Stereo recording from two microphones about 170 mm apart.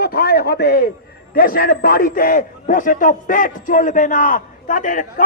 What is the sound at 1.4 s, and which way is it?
A man's voice, 60° left (ahead or behind).